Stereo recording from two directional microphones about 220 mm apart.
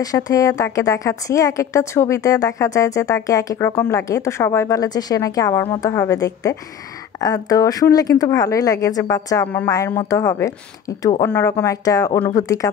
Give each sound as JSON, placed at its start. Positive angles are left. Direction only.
{"t": 0.0, "sound": "a woman's voice", "side_deg": 15}